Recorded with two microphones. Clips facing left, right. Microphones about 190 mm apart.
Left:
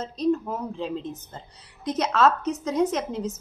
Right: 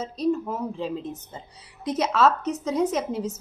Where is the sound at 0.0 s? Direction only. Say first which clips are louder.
Left 1 dB; 5° right (ahead or behind).